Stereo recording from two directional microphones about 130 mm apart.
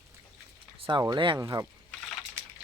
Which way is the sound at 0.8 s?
40° right (ahead or behind).